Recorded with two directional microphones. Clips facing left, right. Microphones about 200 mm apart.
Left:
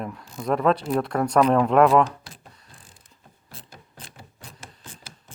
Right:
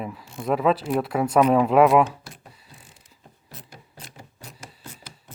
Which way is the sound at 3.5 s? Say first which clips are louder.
Right 1 dB; 30° left (ahead or behind).